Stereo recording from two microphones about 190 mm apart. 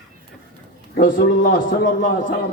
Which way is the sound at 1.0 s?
45° left (ahead or behind).